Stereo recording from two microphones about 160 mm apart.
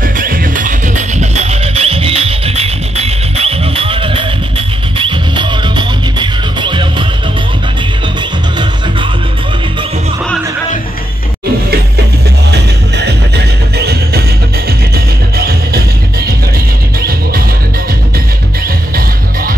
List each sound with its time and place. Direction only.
0.0 s music: 60° right (ahead or behind); by 7.1 s 30° right (ahead or behind)
12.4 s music: 90° right
15.3 s music: 75° right (ahead or behind)